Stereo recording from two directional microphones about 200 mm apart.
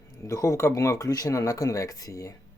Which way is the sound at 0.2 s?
15° left (ahead or behind).